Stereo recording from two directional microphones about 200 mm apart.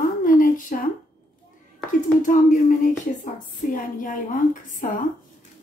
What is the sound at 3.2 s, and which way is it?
A woman's voice, 40° left (ahead or behind).